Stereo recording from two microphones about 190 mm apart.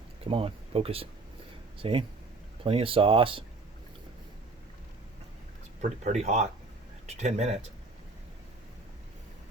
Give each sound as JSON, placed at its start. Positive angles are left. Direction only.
{"t": 0.3, "sound": "speech", "side_deg": -30}
{"t": 5.8, "sound": "speech", "side_deg": -40}